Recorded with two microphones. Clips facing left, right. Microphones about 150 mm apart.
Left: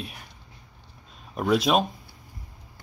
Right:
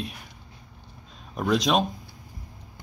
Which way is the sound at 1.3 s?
5° left (ahead or behind).